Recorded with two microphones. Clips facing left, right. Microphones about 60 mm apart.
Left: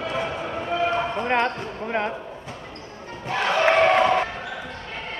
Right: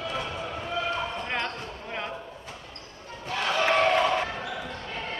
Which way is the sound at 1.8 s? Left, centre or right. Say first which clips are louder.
Left 10 dB; left.